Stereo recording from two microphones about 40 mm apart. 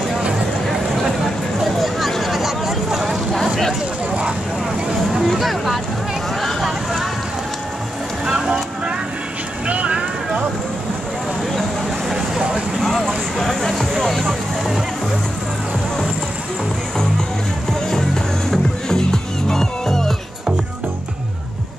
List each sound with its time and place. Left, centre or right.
1.6 s a sound: centre
5.2 s boat: centre
8.3 s vehicle: centre
9.7 s vehicle: right
12.1 s vehicle: right
12.8 s a sound: centre
17.8 s music: centre